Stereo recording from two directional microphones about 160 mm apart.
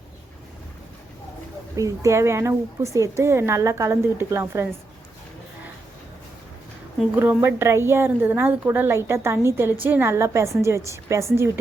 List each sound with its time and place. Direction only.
1.7 s a woman's voice: 20° right (ahead or behind)
7.2 s a woman's voice: 10° right (ahead or behind)